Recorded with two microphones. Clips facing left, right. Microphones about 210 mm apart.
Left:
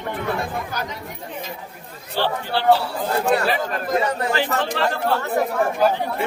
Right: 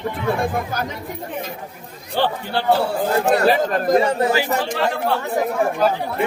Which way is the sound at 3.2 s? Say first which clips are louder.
Right 4 dB; 40° right (ahead or behind).